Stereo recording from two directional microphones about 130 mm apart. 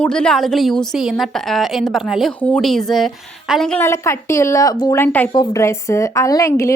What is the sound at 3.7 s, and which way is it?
A woman's voice, 20° left (ahead or behind).